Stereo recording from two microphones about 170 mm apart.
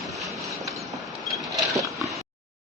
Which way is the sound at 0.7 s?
Centre (ahead or behind).